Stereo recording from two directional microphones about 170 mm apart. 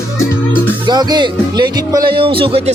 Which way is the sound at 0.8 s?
25° right (ahead or behind).